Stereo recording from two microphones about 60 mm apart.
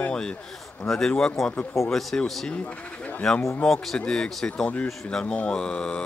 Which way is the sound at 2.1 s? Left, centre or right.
Centre.